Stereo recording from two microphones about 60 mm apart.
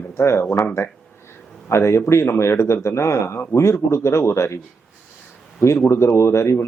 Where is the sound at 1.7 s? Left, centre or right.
Left.